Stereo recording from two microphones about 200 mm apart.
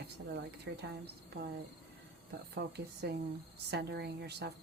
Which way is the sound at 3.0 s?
55° right (ahead or behind).